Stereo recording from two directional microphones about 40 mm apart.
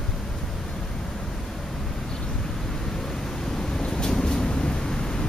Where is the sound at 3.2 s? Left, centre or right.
Centre.